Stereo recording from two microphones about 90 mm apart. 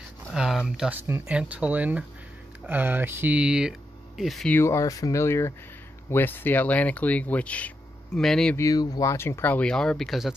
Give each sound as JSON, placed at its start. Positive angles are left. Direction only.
{"t": 0.3, "sound": "a sound", "side_deg": -5}
{"t": 0.7, "sound": "speech", "side_deg": -5}
{"t": 0.9, "sound": "speech", "side_deg": -30}
{"t": 1.2, "sound": "speech", "side_deg": -15}
{"t": 3.3, "sound": "speech", "side_deg": -10}
{"t": 4.5, "sound": "speech", "side_deg": 30}
{"t": 8.5, "sound": "speech", "side_deg": 45}
{"t": 9.1, "sound": "speech", "side_deg": 30}